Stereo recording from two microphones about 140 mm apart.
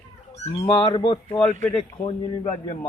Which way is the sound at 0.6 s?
30° left (ahead or behind).